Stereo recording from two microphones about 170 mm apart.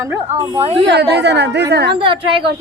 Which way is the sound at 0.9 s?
80° right.